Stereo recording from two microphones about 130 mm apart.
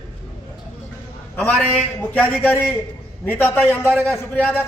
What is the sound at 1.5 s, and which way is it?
A man's voice, 15° left (ahead or behind).